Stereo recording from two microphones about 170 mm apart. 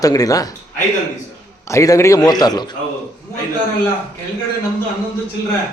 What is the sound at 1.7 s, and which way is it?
Speech, 15° left (ahead or behind).